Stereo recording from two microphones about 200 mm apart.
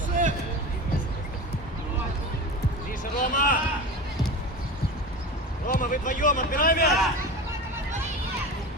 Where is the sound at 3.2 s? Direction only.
40° left (ahead or behind).